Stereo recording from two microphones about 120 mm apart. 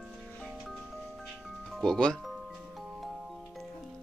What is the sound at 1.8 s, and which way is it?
Speech, 5° left (ahead or behind).